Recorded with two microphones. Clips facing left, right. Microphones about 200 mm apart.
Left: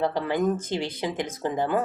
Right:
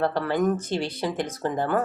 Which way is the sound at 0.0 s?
15° left (ahead or behind).